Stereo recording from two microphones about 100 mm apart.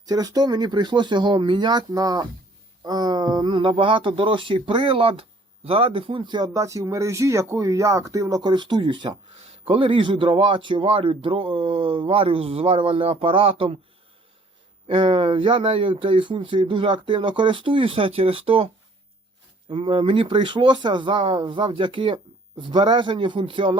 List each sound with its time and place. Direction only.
0.0 s a man's voice: 40° right (ahead or behind)
6.5 s speech: 30° right (ahead or behind); by 9.1 s 50° right (ahead or behind)
9.5 s a man's voice: 65° right (ahead or behind)
14.8 s a man's voice: 60° right (ahead or behind)
19.7 s a man's voice: 65° right (ahead or behind)